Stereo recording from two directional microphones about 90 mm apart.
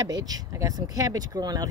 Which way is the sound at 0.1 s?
45° right (ahead or behind).